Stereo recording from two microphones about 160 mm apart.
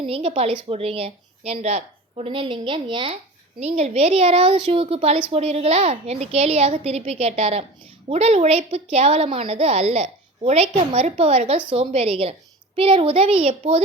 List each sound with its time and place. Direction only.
0.0 s a woman's voice: 35° right (ahead or behind)
3.6 s a woman's voice: 40° right (ahead or behind)